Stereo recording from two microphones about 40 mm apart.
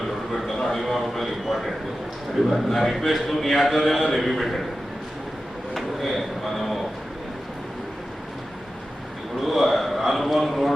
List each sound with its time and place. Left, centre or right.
0.3 s a man's voice: centre
5.7 s speech: centre
9.4 s a man's voice: centre